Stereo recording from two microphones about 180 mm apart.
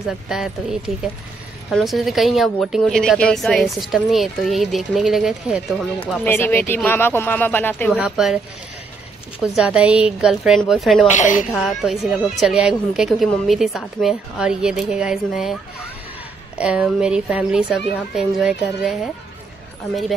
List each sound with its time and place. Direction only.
0.3 s a woman's voice: 5° right (ahead or behind)
6.2 s speech: 10° left (ahead or behind)
7.9 s a woman's voice: centre (ahead or behind)
9.4 s a woman's voice: 5° right (ahead or behind)
11.1 s a woman's voice: 45° left (ahead or behind)
11.5 s a woman's voice: centre (ahead or behind)
16.5 s a woman's voice: 5° right (ahead or behind)